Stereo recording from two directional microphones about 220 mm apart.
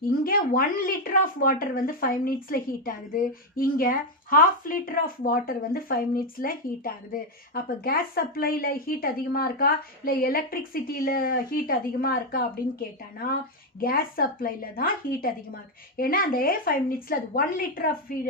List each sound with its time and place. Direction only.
0.3 s speech: 40° left (ahead or behind)
13.7 s speech: 40° left (ahead or behind)